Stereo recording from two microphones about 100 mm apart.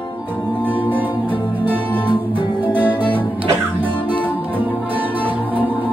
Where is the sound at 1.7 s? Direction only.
15° left (ahead or behind).